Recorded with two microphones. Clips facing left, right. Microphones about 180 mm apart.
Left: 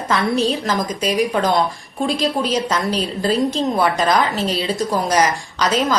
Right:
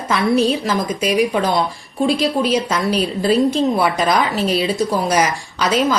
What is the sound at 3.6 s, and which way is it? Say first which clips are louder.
A woman's voice: right 1 dB; 10° right (ahead or behind).